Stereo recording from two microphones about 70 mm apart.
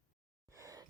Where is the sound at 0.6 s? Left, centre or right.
Right.